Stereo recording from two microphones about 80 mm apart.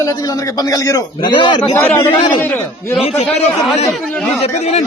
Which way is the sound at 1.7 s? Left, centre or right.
Left.